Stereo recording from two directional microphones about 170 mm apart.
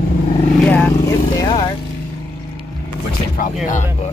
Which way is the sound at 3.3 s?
50° left (ahead or behind).